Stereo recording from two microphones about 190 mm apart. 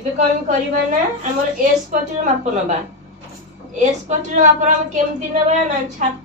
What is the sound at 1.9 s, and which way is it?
Speech, 40° right (ahead or behind).